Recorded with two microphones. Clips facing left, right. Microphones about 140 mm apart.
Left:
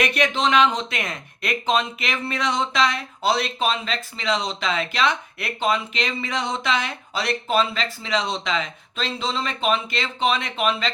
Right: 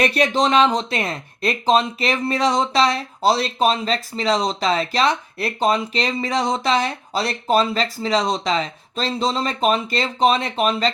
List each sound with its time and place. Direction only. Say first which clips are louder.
0.0 s speech: right 3 dB; 35° right (ahead or behind)